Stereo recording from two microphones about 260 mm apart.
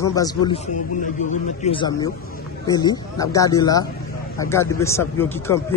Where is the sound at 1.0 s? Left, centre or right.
Left.